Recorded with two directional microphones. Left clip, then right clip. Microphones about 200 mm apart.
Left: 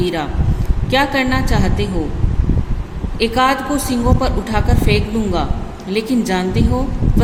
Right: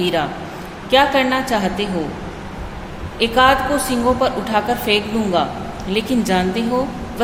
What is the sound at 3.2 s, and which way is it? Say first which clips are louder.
A woman's voice: right 2 dB; 20° left (ahead or behind).